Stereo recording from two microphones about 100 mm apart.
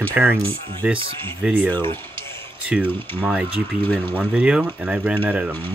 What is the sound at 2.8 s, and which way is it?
Speech, 20° left (ahead or behind).